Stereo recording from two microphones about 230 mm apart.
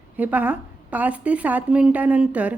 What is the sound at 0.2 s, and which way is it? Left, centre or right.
A woman's voice, centre.